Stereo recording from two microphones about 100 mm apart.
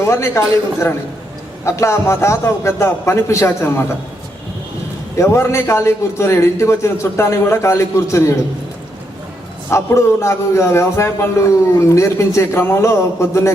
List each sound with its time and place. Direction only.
0.0 s a man's voice: 25° left (ahead or behind)
5.1 s a man's voice: 25° left (ahead or behind)
9.6 s a man's voice: 25° left (ahead or behind)